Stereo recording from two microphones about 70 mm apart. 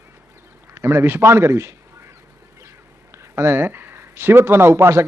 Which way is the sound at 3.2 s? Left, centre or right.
Right.